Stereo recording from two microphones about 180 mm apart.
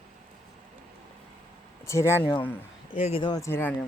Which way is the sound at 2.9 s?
35° left (ahead or behind).